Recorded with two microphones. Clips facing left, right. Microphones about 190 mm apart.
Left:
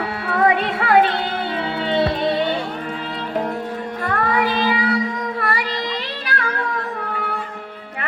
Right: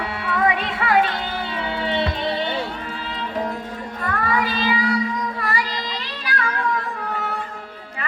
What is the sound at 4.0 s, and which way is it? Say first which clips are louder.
Child singing: left 2 dB; 50° left (ahead or behind).